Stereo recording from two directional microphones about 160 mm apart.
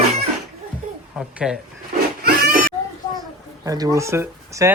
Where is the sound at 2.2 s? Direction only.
75° right (ahead or behind).